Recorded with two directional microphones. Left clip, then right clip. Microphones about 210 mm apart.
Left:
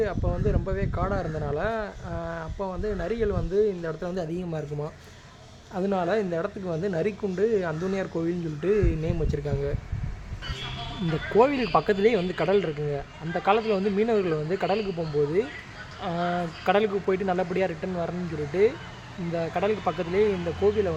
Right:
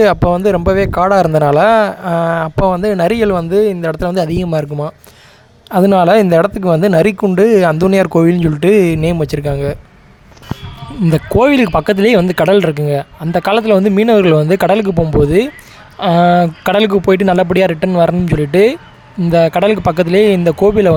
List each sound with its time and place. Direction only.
0.0 s speech: 60° right (ahead or behind)
11.1 s speech: 55° right (ahead or behind)
16.0 s speech: 60° right (ahead or behind)
19.3 s speech: 55° right (ahead or behind)